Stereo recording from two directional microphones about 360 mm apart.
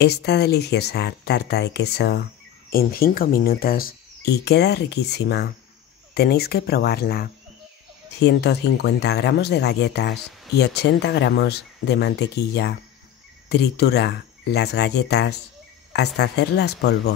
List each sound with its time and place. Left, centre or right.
0.0 s speech: left